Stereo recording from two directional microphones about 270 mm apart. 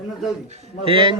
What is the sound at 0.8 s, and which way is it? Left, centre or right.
Speech, centre.